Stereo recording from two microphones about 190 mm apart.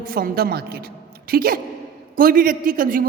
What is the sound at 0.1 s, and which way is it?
A man's voice, 50° right (ahead or behind).